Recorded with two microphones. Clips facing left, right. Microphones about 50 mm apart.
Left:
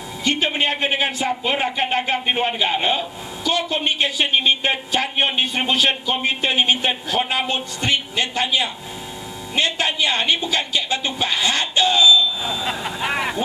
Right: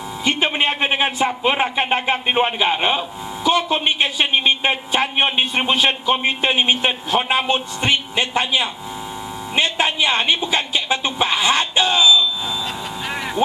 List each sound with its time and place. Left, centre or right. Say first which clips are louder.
0.2 s a man's voice: right 1 dB; centre
12.6 s vehicle: left 3 dB; left